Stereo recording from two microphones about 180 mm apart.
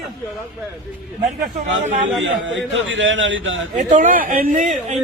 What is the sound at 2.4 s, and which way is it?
Speech, 90° right.